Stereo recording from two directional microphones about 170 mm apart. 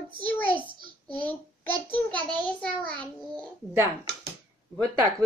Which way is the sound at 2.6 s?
5° left (ahead or behind).